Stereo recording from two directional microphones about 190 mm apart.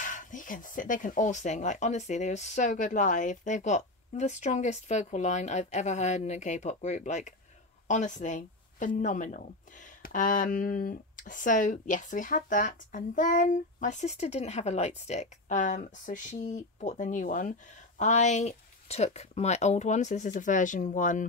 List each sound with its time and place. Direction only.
0.0 s speech: 40° left (ahead or behind)